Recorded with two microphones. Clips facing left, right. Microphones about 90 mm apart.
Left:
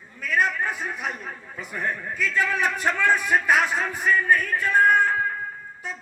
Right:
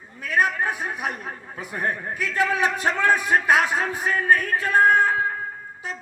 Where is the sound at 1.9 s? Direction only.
65° right (ahead or behind).